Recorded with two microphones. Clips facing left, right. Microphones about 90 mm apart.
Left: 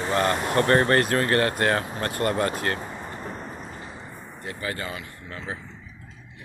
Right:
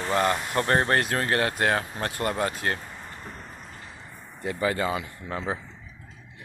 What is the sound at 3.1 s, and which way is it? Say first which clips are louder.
Vehicle: left 6 dB; 30° left (ahead or behind).